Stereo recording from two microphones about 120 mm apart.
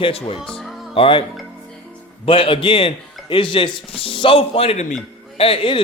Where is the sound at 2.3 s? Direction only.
45° left (ahead or behind).